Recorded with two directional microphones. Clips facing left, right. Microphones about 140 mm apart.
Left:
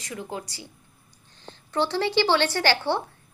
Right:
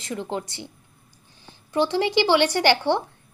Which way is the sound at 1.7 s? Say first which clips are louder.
Right 2 dB; 15° right (ahead or behind).